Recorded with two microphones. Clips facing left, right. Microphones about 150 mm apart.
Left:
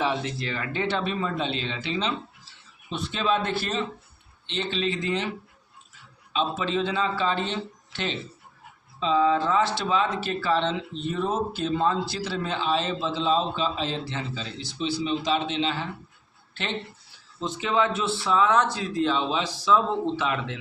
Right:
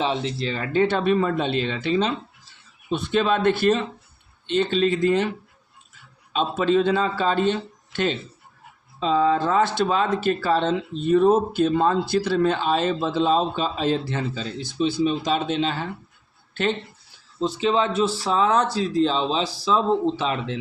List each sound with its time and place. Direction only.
0.0 s speech: 25° right (ahead or behind); by 5.3 s 50° right (ahead or behind)
6.3 s speech: 50° right (ahead or behind)
17.4 s speech: 30° right (ahead or behind)